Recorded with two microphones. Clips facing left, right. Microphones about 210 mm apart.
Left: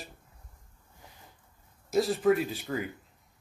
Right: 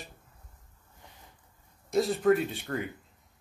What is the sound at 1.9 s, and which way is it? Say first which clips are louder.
Speech: even; centre (ahead or behind).